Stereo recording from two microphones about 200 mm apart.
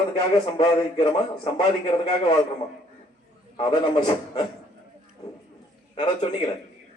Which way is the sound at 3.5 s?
25° left (ahead or behind).